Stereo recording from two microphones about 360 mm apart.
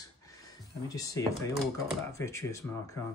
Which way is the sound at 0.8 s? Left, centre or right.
Centre.